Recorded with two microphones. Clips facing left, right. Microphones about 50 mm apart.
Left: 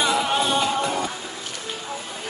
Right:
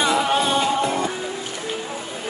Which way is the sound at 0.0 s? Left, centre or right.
Right.